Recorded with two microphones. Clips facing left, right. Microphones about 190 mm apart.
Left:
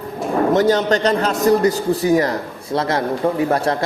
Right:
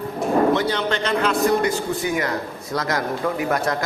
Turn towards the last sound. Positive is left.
turn(degrees=30)  # may be behind; listen again after turning